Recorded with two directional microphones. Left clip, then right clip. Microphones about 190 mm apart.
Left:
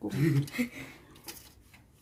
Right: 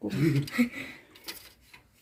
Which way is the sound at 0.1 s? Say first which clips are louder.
Right 3 dB; 10° right (ahead or behind).